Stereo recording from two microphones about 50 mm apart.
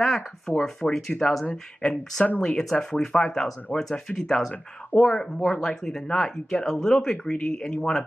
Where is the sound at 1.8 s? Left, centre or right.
Centre.